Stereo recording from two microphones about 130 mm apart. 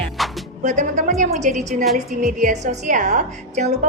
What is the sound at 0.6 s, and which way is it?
A woman's voice, 70° right (ahead or behind).